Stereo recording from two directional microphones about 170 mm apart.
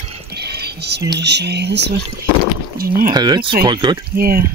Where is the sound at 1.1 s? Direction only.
85° right.